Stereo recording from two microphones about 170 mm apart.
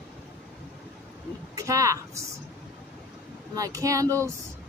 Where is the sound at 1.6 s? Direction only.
20° right (ahead or behind).